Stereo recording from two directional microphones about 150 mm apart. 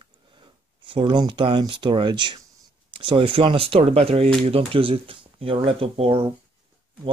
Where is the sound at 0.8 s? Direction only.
35° right (ahead or behind).